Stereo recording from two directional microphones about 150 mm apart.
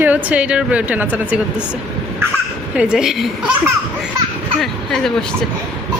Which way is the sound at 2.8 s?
5° right (ahead or behind).